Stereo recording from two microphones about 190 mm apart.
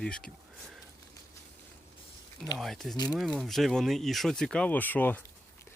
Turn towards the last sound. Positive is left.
turn(degrees=10)  # may be behind; listen again after turning